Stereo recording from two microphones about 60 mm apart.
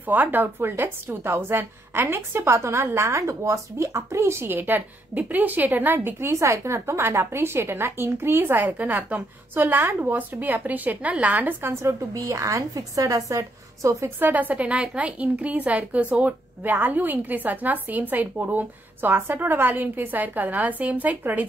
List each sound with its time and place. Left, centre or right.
0.0 s a woman's voice: right
4.5 s a woman's voice: right
6.0 s a woman's voice: right
6.3 s a woman's voice: right
11.8 s a woman's voice: right
14.2 s a woman's voice: right